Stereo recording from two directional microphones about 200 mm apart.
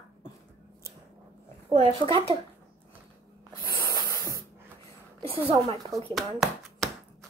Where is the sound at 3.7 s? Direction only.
15° left (ahead or behind).